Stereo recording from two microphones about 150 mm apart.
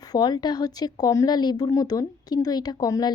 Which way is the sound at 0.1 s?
25° left (ahead or behind).